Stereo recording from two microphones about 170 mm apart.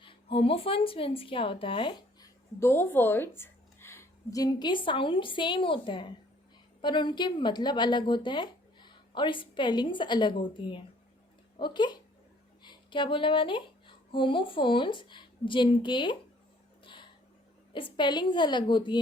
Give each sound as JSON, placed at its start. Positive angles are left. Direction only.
{"t": 0.0, "sound": "speech", "side_deg": 30}
{"t": 2.6, "sound": "a woman's voice", "side_deg": 15}
{"t": 16.8, "sound": "a sound", "side_deg": 30}
{"t": 17.7, "sound": "a woman's voice", "side_deg": 30}